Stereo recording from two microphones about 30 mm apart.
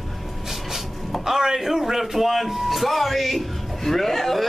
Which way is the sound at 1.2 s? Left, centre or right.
Centre.